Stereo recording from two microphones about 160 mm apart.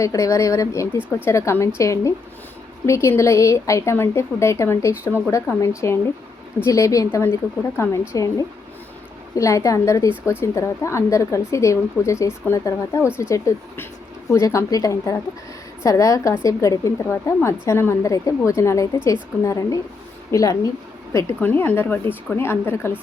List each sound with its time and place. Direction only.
0.0 s a woman's voice: 20° left (ahead or behind)